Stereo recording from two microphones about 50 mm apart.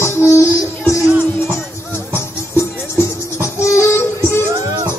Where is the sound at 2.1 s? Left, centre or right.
Left.